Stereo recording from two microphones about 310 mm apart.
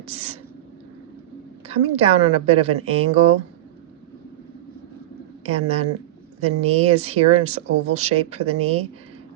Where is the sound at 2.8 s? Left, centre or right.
Right.